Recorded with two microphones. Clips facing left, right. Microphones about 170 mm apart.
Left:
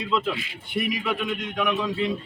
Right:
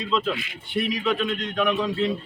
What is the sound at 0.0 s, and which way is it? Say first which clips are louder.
A man's voice: right 1 dB; 10° left (ahead or behind).